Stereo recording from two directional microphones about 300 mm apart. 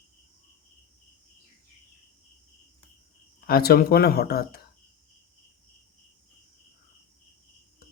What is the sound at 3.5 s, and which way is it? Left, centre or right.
Speech, left.